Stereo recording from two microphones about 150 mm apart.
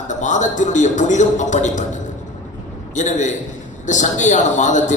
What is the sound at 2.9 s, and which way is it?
Speech, 55° left (ahead or behind).